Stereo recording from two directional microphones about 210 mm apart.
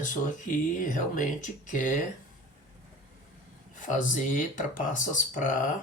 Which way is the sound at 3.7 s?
35° left (ahead or behind).